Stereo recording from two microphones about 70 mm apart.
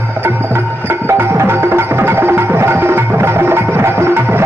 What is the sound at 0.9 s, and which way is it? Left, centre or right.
Music, right.